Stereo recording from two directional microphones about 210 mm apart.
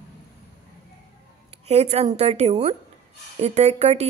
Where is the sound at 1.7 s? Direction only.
30° right (ahead or behind).